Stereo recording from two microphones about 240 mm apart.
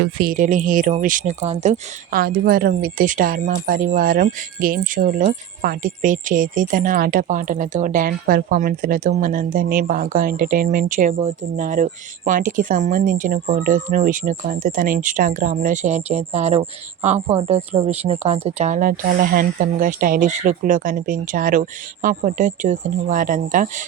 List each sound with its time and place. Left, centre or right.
0.0 s speech: right